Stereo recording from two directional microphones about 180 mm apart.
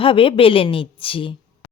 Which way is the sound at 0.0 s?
30° left (ahead or behind).